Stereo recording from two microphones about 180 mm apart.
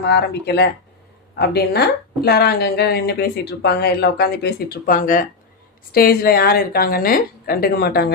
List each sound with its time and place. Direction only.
0.0 s speech: 65° left (ahead or behind)